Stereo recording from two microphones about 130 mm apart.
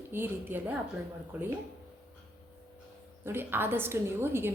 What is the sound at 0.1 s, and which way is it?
A woman's voice, 15° right (ahead or behind).